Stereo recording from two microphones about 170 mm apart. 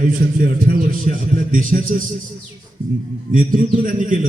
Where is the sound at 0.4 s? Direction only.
55° right (ahead or behind).